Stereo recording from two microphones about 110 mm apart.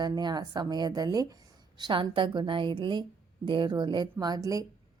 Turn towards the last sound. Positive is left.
turn(degrees=-30)  # may be behind; listen again after turning